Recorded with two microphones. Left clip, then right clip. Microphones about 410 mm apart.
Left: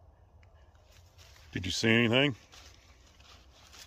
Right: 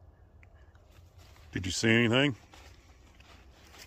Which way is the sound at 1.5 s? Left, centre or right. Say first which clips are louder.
Even; centre.